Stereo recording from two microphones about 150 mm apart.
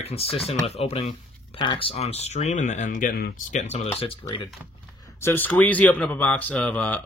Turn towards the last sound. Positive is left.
turn(degrees=10)  # may be behind; listen again after turning